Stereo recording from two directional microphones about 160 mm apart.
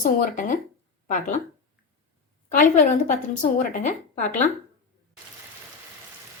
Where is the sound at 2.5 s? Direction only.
50° left (ahead or behind).